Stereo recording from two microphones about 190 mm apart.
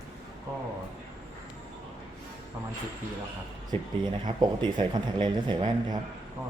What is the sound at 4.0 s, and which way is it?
Speech, 25° right (ahead or behind).